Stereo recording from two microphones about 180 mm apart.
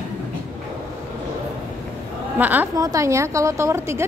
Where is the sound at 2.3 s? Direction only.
10° right (ahead or behind).